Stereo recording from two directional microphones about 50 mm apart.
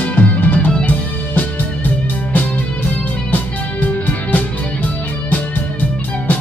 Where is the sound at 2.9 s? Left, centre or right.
Left.